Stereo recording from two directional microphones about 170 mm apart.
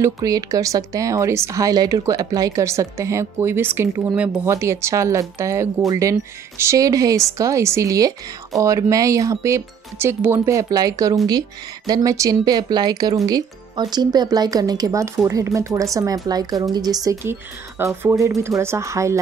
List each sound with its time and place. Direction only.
0.0 s speech: 20° right (ahead or behind)